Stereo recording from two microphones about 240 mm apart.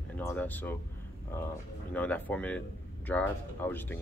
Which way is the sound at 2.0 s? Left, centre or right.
Centre.